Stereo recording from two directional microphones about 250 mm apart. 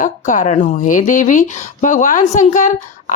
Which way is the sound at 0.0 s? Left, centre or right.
Left.